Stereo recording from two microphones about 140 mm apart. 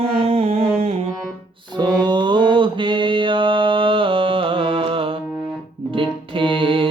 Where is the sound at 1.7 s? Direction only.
30° right (ahead or behind).